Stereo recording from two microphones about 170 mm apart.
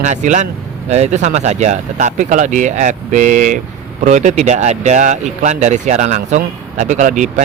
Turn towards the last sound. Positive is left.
turn(degrees=-50)  # may be behind; listen again after turning